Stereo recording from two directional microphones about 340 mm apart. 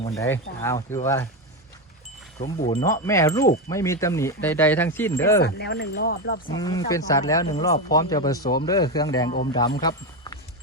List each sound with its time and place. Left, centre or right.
0.0 s speech: centre
2.6 s speech: centre
5.4 s speech: left
6.5 s speech: centre
9.3 s speech: left